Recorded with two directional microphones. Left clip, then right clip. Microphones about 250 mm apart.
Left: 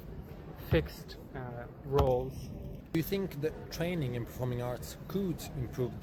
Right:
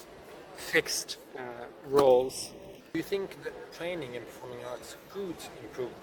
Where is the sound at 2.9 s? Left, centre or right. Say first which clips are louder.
Right 2 dB; left.